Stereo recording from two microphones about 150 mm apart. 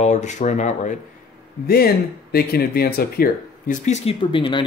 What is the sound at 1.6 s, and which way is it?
Speech, 90° left.